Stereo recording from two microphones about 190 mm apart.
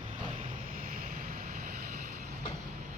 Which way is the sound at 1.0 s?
50° right (ahead or behind).